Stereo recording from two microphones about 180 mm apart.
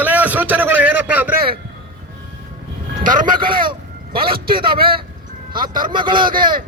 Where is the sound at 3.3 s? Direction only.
25° right (ahead or behind).